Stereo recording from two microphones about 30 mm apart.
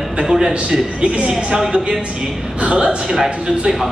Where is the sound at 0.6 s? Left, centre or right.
Right.